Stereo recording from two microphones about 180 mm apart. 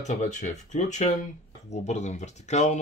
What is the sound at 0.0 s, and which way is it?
Speech, 40° left (ahead or behind).